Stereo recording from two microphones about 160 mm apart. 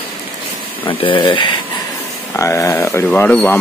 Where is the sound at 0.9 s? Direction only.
30° left (ahead or behind).